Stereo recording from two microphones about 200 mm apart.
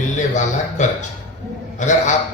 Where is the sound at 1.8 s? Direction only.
35° left (ahead or behind).